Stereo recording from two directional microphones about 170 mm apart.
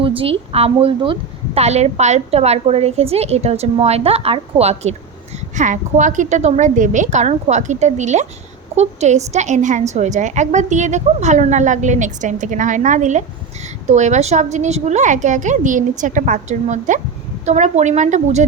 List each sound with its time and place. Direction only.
0.0 s a woman's voice: 35° right (ahead or behind)